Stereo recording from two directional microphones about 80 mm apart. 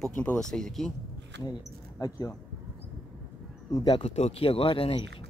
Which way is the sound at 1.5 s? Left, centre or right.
Left.